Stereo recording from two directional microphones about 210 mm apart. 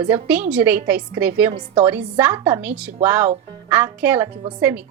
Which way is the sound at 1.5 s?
25° right (ahead or behind).